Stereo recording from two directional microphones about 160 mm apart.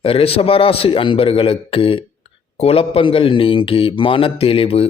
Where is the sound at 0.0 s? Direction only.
35° left (ahead or behind).